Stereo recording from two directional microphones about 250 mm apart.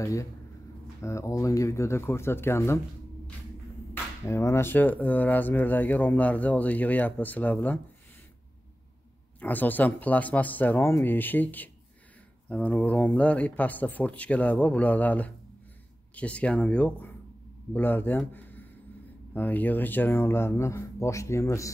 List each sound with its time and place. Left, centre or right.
0.0 s speech: centre
3.9 s speech: centre
9.4 s speech: centre